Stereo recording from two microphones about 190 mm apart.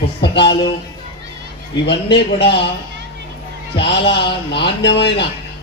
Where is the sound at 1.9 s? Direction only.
65° left (ahead or behind).